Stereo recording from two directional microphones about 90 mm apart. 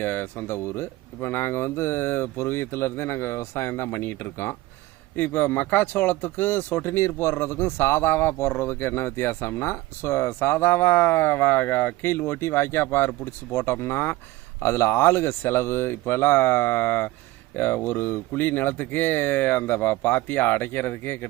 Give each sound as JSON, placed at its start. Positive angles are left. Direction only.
{"t": 0.0, "sound": "speech", "side_deg": 25}